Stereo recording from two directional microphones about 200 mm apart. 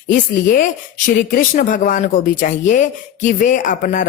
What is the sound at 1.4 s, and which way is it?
Speech, 40° left (ahead or behind).